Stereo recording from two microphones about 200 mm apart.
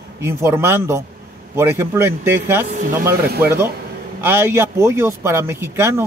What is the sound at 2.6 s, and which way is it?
Speech, 40° right (ahead or behind).